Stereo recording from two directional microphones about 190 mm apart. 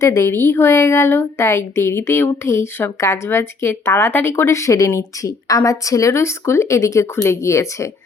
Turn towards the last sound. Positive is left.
turn(degrees=15)  # may be behind; listen again after turning